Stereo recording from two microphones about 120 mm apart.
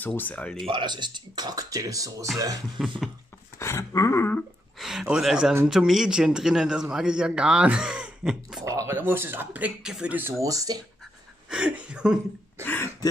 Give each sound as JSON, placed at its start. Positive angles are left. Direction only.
{"t": 0.0, "sound": "speech", "side_deg": 15}
{"t": 0.7, "sound": "speech", "side_deg": -40}
{"t": 3.5, "sound": "a sound", "side_deg": 25}
{"t": 4.7, "sound": "a sound", "side_deg": -5}
{"t": 5.1, "sound": "a man's voice", "side_deg": -5}
{"t": 8.6, "sound": "speech", "side_deg": -25}
{"t": 10.4, "sound": "speech", "side_deg": -30}
{"t": 11.5, "sound": "speech", "side_deg": -10}
{"t": 12.6, "sound": "throat clearing", "side_deg": 20}